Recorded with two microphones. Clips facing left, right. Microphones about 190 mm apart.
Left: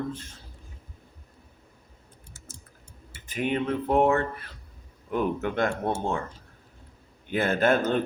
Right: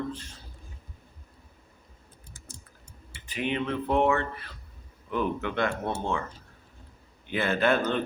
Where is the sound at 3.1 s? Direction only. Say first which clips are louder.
Left 3 dB; 45° left (ahead or behind).